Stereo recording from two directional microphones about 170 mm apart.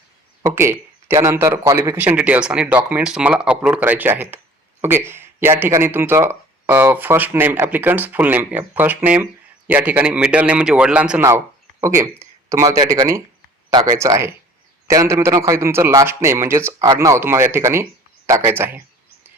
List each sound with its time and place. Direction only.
0.4 s speech: 15° right (ahead or behind)